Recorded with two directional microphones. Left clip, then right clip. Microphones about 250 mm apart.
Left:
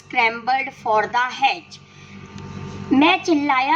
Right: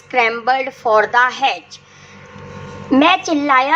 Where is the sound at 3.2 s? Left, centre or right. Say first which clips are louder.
Right 1 dB; centre.